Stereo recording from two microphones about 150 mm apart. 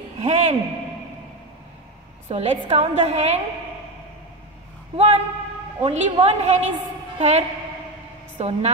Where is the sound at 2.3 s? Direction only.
40° right (ahead or behind).